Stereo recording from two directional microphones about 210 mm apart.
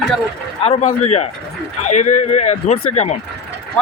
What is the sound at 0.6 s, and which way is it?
Speech, 30° left (ahead or behind).